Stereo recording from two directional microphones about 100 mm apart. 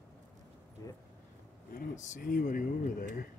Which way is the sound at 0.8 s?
35° left (ahead or behind).